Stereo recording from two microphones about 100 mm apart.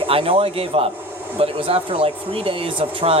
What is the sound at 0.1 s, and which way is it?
Speech, 70° right (ahead or behind).